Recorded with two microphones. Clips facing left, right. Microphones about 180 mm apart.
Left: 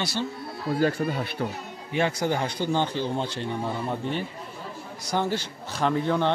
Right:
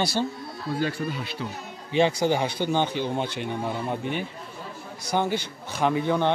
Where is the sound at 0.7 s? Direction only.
45° left (ahead or behind).